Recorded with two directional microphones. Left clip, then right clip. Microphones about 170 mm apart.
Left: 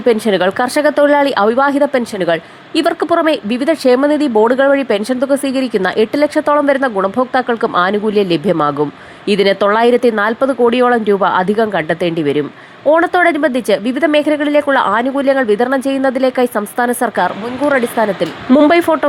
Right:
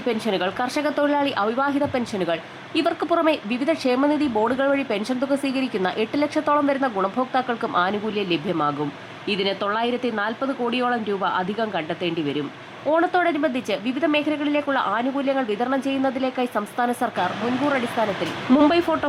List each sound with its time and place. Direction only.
0.0 s speech: 35° left (ahead or behind)